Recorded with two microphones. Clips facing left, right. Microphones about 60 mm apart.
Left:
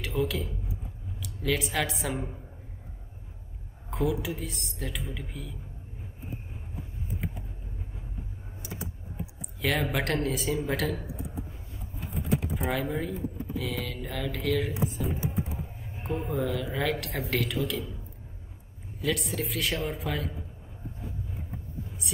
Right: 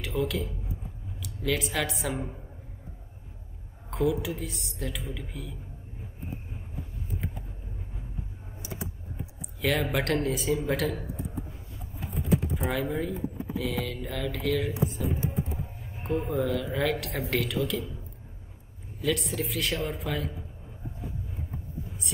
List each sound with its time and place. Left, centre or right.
0.0 s a man's voice: centre
3.9 s speech: centre
8.6 s computer keyboard: centre
9.6 s speech: centre
12.5 s speech: centre
18.9 s speech: centre